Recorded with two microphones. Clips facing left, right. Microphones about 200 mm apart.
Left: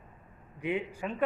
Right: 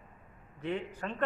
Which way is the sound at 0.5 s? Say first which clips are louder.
Left 3 dB; 10° left (ahead or behind).